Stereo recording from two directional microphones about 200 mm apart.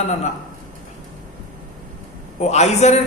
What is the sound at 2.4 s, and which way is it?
Speech, 35° left (ahead or behind).